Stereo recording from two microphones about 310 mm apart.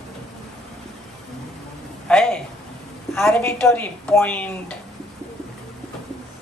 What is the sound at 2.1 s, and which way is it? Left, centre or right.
Speech, centre.